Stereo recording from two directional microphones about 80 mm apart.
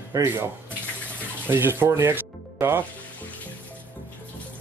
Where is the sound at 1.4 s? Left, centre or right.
Right.